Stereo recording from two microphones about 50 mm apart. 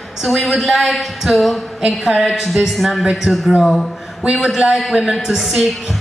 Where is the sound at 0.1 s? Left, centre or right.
Centre.